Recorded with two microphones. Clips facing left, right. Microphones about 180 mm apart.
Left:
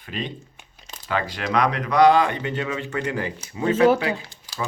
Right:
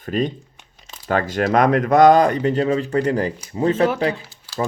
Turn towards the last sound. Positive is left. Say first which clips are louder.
# right 7 dB
turn(degrees=15)  # may be behind; listen again after turning